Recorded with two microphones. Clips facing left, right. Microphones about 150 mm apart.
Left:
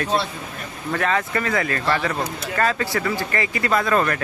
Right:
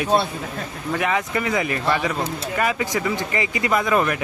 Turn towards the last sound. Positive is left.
turn(degrees=-15)  # may be behind; listen again after turning